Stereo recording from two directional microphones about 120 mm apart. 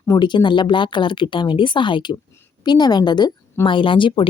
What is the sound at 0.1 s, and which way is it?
Speech, 40° left (ahead or behind).